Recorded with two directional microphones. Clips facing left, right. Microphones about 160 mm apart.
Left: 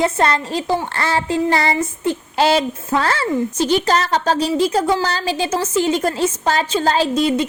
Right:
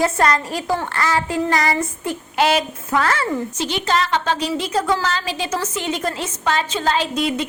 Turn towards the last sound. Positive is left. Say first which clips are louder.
# left 5 dB
turn(degrees=35)  # may be behind; listen again after turning